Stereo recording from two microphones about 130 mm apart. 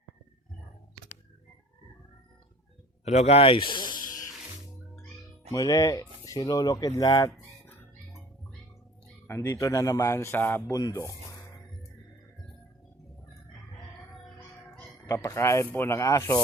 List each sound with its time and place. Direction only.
3.0 s speech: 60° left (ahead or behind); by 3.8 s 40° left (ahead or behind)
3.9 s music: 30° left (ahead or behind)
5.5 s speech: 30° left (ahead or behind)
9.2 s speech: 20° left (ahead or behind)
10.8 s speech: 30° left (ahead or behind)
15.0 s speech: 25° left (ahead or behind)